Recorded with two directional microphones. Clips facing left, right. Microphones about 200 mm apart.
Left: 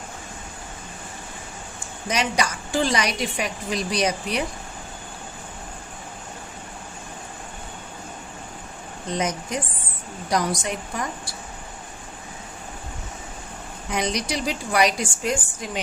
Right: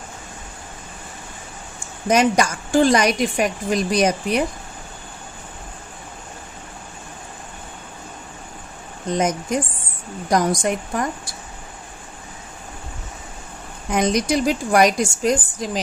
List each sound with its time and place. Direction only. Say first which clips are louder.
2.0 s a woman's voice: right 8 dB; 50° right (ahead or behind)
9.1 s a woman's voice: right 5 dB; 50° right (ahead or behind)
13.9 s a woman's voice: right 7 dB; 50° right (ahead or behind)